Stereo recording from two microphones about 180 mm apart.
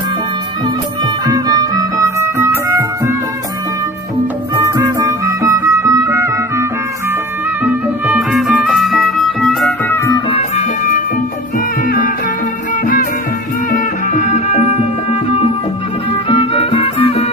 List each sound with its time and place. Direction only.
1.3 s music: 20° right (ahead or behind)
4.6 s music: 20° right (ahead or behind); by 9.7 s centre (ahead or behind)
11.9 s music: 50° left (ahead or behind)
13.7 s music: 45° left (ahead or behind)
16.3 s music: 35° left (ahead or behind)